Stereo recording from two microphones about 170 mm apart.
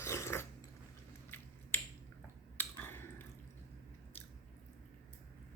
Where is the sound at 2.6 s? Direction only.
15° left (ahead or behind).